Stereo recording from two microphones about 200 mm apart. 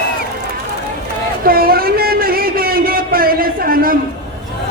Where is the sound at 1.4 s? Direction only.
50° right (ahead or behind).